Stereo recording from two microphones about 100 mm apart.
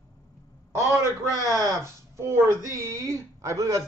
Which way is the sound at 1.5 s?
30° right (ahead or behind).